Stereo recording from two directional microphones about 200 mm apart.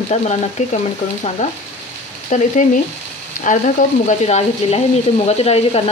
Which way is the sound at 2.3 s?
40° left (ahead or behind).